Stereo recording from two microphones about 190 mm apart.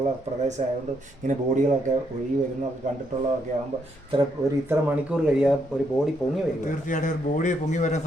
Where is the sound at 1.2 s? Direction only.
40° right (ahead or behind).